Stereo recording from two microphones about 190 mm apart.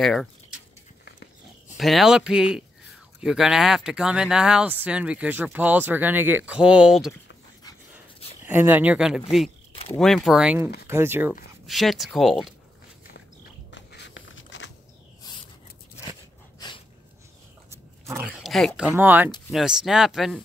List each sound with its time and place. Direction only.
0.0 s speech: centre (ahead or behind)
1.8 s speech: centre (ahead or behind)
8.5 s speech: 10° right (ahead or behind)
11.6 s speech: centre (ahead or behind)
13.7 s a sound: 70° left (ahead or behind)
16.1 s a sound: 25° left (ahead or behind)
17.6 s roaring cats: 15° right (ahead or behind)
18.4 s a sound: centre (ahead or behind)
18.8 s speech: 10° right (ahead or behind)